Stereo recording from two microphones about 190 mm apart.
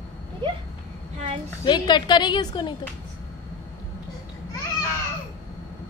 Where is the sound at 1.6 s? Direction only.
25° left (ahead or behind).